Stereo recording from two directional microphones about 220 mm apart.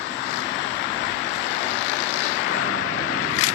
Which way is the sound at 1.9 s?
60° left (ahead or behind).